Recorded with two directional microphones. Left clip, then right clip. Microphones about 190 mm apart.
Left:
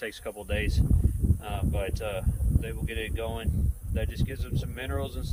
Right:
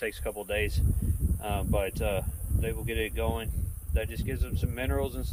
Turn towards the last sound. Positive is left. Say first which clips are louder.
# right 3 dB
turn(degrees=-10)  # may be behind; listen again after turning